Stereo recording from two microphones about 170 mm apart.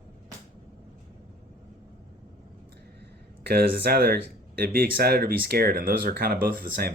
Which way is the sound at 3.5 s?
65° right (ahead or behind).